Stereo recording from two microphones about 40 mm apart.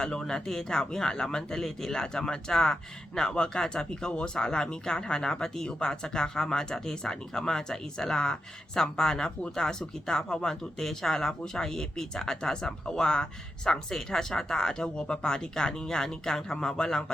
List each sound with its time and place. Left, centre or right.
0.0 s speech: centre